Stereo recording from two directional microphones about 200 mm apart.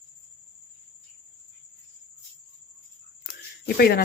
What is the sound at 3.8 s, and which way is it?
Speech, 50° left (ahead or behind).